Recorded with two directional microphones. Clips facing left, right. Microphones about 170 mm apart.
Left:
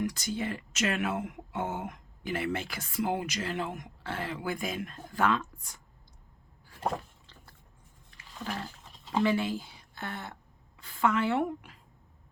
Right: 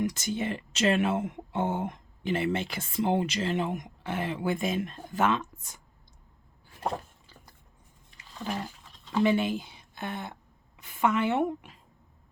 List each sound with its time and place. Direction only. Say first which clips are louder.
0.0 s speech: right 2 dB; 20° right (ahead or behind)
9.2 s a woman's voice: right 4 dB; 20° right (ahead or behind)